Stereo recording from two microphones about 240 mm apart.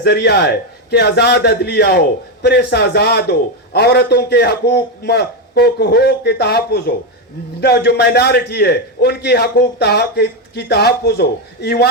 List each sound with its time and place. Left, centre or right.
0.0 s a man's voice: left